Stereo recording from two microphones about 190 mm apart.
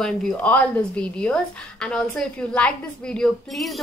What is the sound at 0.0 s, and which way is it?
A woman's voice, 5° left (ahead or behind).